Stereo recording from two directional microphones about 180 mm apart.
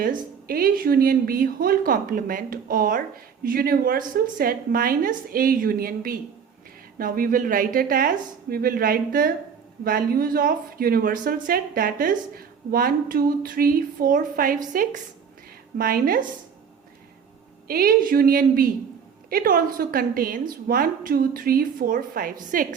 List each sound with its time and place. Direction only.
0.0 s a woman's voice: 50° right (ahead or behind)
17.7 s a woman's voice: 55° right (ahead or behind)